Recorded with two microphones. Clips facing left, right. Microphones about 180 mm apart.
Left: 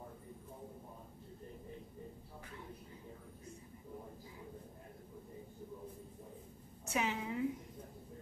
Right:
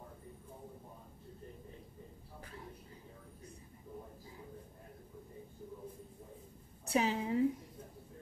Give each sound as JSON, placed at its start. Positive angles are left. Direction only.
{"t": 6.9, "sound": "a woman's voice", "side_deg": -35}